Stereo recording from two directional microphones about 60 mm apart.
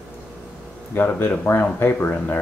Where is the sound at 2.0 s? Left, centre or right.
Left.